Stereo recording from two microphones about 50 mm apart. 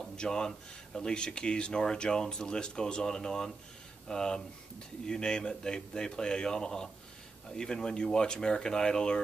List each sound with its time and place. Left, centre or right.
0.0 s speech: centre